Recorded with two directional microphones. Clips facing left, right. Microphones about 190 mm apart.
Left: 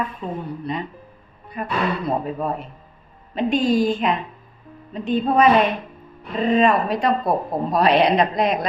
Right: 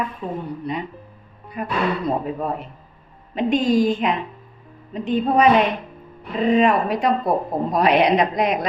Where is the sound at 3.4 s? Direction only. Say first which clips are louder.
Right 1 dB; 20° right (ahead or behind).